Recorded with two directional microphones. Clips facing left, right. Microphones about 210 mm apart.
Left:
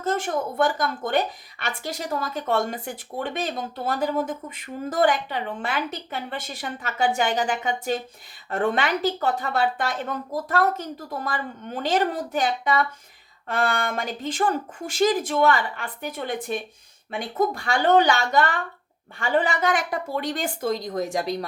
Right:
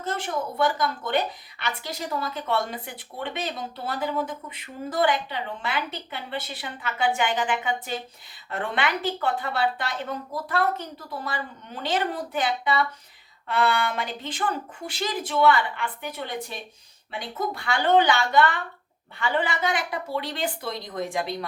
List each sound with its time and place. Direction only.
0.0 s a woman's voice: 45° left (ahead or behind)